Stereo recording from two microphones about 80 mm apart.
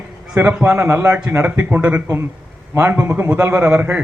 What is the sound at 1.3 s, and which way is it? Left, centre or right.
Speech, right.